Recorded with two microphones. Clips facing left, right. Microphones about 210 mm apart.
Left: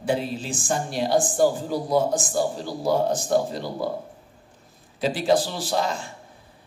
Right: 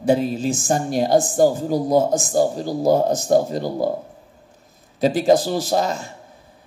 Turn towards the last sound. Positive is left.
turn(degrees=-45)  # may be behind; listen again after turning